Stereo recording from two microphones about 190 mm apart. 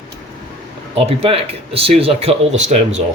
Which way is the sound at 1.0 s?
30° right (ahead or behind).